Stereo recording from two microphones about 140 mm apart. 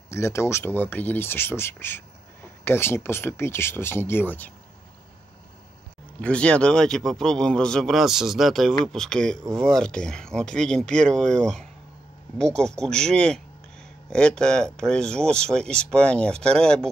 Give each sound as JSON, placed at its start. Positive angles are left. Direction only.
{"t": 0.1, "sound": "speech", "side_deg": 20}
{"t": 6.2, "sound": "speech", "side_deg": 10}
{"t": 14.1, "sound": "speech", "side_deg": 5}